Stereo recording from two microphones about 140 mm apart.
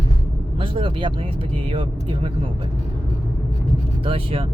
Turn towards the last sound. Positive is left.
turn(degrees=-40)  # may be behind; listen again after turning